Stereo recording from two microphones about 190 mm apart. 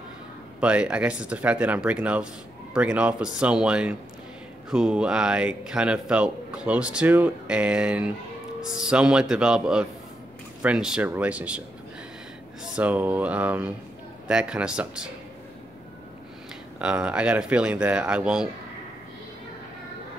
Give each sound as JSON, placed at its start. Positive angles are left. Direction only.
{"t": 0.6, "sound": "speech", "side_deg": -5}
{"t": 12.7, "sound": "speech", "side_deg": -10}
{"t": 16.7, "sound": "speech", "side_deg": -5}